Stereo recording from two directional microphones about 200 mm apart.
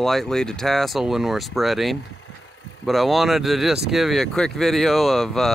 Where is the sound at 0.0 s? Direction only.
Centre (ahead or behind).